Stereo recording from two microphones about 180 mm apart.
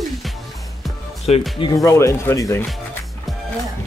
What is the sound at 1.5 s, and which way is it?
Speech, 20° left (ahead or behind).